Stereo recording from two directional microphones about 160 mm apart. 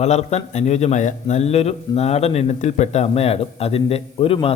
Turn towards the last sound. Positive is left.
turn(degrees=35)  # may be behind; listen again after turning